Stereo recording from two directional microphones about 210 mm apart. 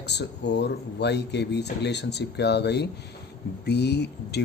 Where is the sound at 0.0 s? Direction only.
55° left (ahead or behind).